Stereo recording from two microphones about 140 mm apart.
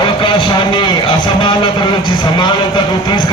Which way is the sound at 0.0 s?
35° left (ahead or behind).